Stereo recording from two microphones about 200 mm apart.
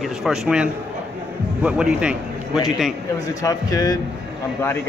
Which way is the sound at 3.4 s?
15° left (ahead or behind).